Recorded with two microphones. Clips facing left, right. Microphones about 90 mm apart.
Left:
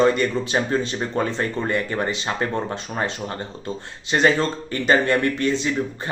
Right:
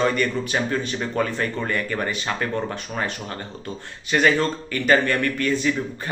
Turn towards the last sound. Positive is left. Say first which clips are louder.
# left 1 dB
turn(degrees=25)  # may be behind; listen again after turning